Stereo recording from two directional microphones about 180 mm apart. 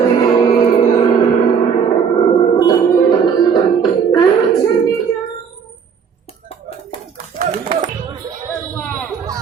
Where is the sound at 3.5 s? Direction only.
25° left (ahead or behind).